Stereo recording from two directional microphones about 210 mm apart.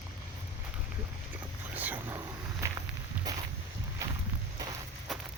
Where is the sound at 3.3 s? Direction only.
20° right (ahead or behind).